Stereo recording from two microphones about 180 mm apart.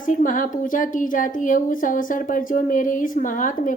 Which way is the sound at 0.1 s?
45° left (ahead or behind).